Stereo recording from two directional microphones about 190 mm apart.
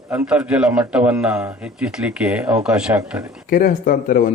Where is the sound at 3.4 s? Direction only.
45° left (ahead or behind).